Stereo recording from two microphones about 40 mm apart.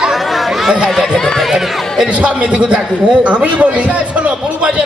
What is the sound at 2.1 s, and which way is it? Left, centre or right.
A man's voice, right.